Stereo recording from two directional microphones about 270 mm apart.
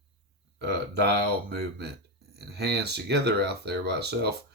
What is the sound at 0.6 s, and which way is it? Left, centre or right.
Speech, right.